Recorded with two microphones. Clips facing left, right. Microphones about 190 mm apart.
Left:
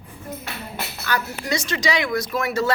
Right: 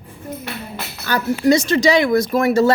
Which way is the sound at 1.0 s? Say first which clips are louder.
Right 11 dB; 30° right (ahead or behind).